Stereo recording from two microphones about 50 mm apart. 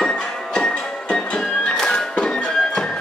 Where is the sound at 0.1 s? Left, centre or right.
Centre.